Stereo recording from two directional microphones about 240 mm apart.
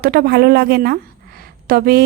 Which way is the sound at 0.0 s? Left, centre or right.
Right.